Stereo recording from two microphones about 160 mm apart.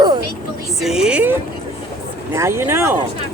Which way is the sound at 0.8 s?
5° right (ahead or behind).